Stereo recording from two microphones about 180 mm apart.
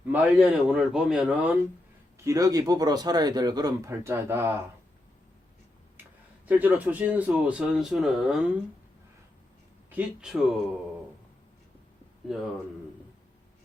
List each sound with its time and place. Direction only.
0.1 s a man's voice: 5° right (ahead or behind)
2.1 s speech: 20° right (ahead or behind)
6.5 s speech: 10° right (ahead or behind)
9.9 s a man's voice: 5° right (ahead or behind)